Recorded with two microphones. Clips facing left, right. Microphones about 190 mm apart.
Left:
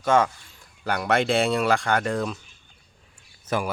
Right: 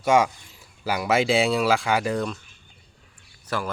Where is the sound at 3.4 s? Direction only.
20° left (ahead or behind).